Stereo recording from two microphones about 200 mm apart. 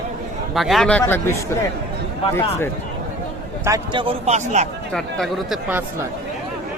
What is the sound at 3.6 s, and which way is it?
A man's voice, 20° right (ahead or behind).